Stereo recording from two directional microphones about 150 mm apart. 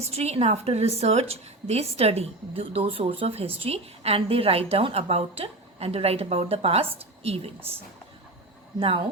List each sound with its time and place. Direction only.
0.0 s a woman's voice: 45° right (ahead or behind)
8.8 s a woman's voice: 35° right (ahead or behind)